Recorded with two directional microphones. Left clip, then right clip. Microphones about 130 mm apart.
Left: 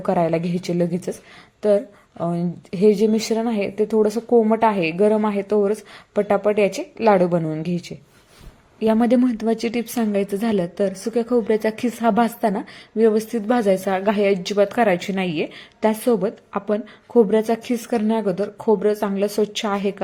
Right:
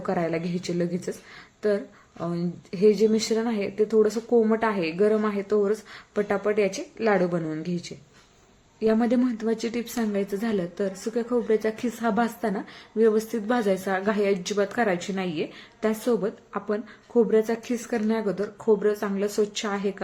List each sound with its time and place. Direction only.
0.0 s a woman's voice: 35° left (ahead or behind)